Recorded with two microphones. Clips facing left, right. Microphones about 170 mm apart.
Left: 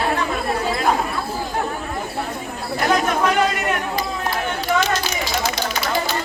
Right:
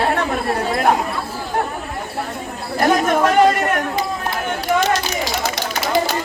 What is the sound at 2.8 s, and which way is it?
Speech, 45° right (ahead or behind).